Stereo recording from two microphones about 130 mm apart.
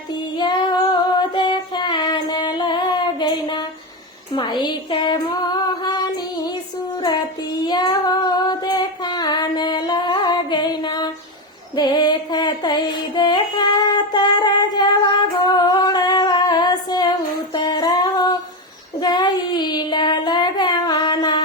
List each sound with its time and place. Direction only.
0.1 s child singing: 35° left (ahead or behind)
4.4 s female singing: 35° left (ahead or behind)
7.6 s child singing: 30° left (ahead or behind)
11.7 s mantra: 35° left (ahead or behind)
15.5 s singing: 30° left (ahead or behind)
17.5 s music: 35° left (ahead or behind)
18.9 s child singing: 35° left (ahead or behind)